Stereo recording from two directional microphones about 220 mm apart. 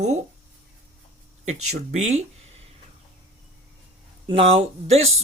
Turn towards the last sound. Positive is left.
turn(degrees=-25)  # may be behind; listen again after turning